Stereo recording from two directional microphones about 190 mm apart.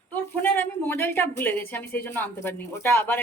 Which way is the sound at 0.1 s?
10° left (ahead or behind).